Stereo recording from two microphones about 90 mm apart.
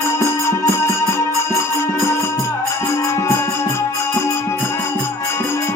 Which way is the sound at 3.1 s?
30° left (ahead or behind).